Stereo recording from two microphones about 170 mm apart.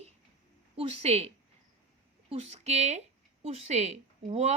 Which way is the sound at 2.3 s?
40° right (ahead or behind).